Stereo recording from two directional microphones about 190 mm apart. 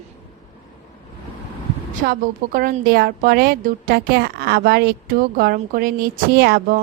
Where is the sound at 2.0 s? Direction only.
50° right (ahead or behind).